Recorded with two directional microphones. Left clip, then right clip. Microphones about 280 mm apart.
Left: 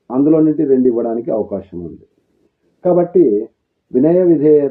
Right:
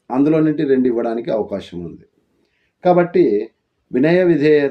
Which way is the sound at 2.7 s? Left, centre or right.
Centre.